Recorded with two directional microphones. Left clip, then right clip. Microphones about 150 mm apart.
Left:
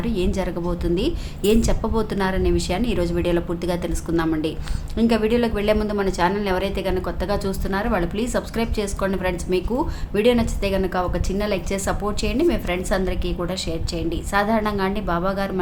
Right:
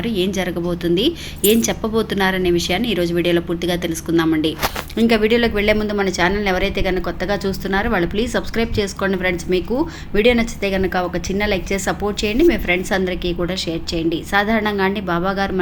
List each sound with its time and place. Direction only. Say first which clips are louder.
0.0 s a woman's voice: right 4 dB; 10° right (ahead or behind)
4.9 s a woman's voice: right 4 dB; 20° right (ahead or behind)